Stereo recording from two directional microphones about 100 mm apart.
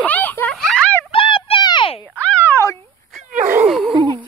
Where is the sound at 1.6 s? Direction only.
50° left (ahead or behind).